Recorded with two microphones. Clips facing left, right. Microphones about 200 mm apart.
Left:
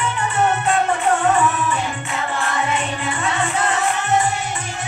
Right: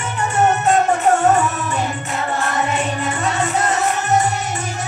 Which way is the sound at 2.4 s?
40° right (ahead or behind).